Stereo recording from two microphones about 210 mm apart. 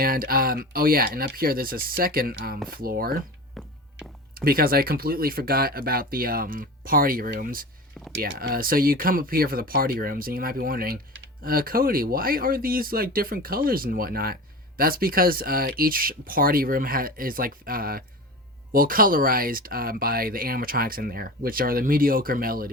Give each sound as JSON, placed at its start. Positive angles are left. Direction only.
{"t": 0.0, "sound": "speech", "side_deg": -45}
{"t": 4.4, "sound": "speech", "side_deg": -45}